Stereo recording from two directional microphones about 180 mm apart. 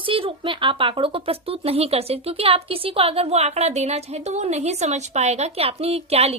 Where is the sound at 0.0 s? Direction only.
30° right (ahead or behind).